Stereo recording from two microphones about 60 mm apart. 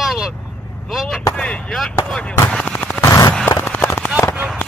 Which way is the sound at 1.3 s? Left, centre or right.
Centre.